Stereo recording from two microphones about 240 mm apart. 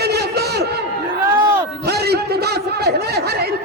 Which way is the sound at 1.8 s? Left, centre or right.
Right.